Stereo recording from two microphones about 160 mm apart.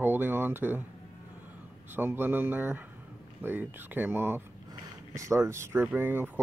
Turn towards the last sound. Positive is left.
turn(degrees=-10)  # may be behind; listen again after turning